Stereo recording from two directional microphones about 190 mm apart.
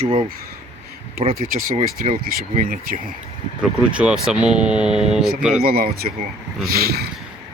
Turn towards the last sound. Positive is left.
turn(degrees=-55)  # may be behind; listen again after turning